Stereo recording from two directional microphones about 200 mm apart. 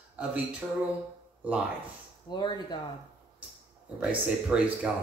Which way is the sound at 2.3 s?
25° left (ahead or behind).